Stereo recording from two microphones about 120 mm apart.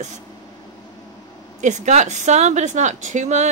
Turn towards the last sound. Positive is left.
turn(degrees=-75)  # may be behind; listen again after turning